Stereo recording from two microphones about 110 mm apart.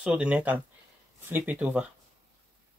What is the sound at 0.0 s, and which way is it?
Speech, 10° right (ahead or behind).